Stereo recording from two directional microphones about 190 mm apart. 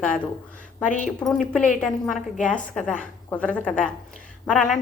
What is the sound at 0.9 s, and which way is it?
Speech, 40° left (ahead or behind).